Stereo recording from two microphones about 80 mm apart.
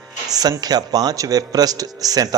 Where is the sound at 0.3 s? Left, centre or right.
Right.